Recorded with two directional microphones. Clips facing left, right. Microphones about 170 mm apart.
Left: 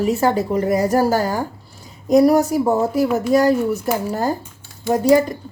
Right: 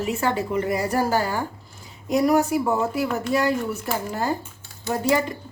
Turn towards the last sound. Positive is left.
turn(degrees=40)  # may be behind; listen again after turning